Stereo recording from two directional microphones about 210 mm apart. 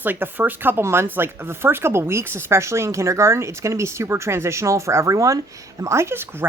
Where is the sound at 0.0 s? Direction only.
10° right (ahead or behind).